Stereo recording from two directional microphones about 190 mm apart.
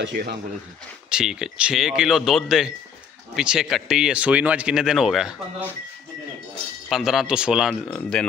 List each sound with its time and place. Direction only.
0.0 s speech: 60° right (ahead or behind)
1.1 s speech: 5° right (ahead or behind)
6.9 s speech: centre (ahead or behind)